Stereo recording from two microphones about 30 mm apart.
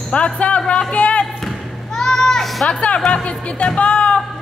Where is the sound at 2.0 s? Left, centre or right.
Centre.